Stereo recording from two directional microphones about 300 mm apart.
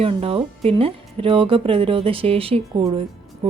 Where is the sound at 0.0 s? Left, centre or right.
Centre.